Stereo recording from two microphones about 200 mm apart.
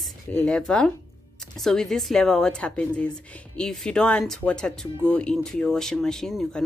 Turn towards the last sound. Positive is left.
turn(degrees=0)  # may be behind; listen again after turning